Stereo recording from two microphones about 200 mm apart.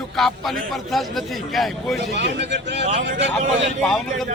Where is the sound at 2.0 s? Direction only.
60° right (ahead or behind).